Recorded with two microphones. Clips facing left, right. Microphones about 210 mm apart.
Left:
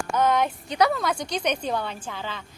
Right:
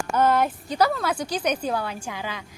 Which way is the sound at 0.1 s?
5° right (ahead or behind).